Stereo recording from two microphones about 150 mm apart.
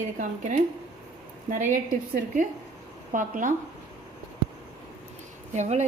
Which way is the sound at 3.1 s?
60° right (ahead or behind).